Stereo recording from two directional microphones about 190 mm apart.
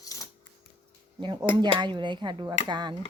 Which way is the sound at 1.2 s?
25° right (ahead or behind).